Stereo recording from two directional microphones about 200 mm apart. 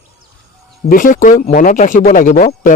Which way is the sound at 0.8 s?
45° left (ahead or behind).